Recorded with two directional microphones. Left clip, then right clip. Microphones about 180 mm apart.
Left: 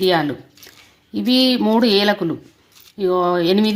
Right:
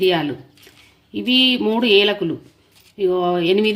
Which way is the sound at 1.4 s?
25° left (ahead or behind).